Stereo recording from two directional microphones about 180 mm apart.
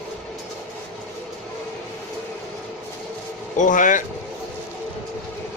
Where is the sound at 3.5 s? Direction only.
45° left (ahead or behind).